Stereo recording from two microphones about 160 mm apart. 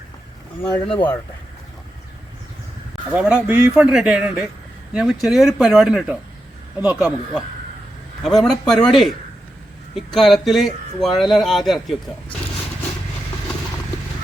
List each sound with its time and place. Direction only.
0.9 s speech: 30° left (ahead or behind)
3.1 s speech: 5° right (ahead or behind)